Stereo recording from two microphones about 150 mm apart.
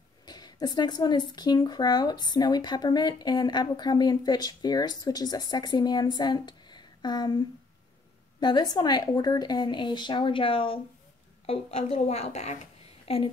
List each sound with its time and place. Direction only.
0.2 s a woman's voice: 25° left (ahead or behind)